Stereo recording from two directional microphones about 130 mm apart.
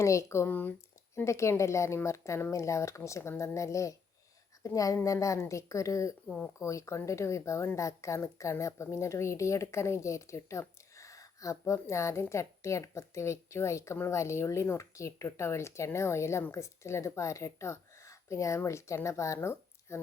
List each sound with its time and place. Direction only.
0.0 s a woman's voice: 25° left (ahead or behind)
6.2 s speech: 5° left (ahead or behind)
6.6 s a woman's voice: 25° left (ahead or behind)